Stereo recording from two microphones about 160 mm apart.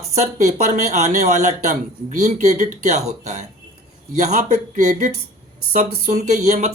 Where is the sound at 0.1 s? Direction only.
45° right (ahead or behind).